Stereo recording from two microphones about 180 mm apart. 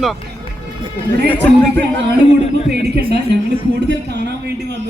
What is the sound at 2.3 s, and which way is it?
Speech, 40° left (ahead or behind).